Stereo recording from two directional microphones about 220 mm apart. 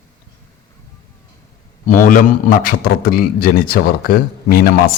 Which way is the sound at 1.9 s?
35° left (ahead or behind).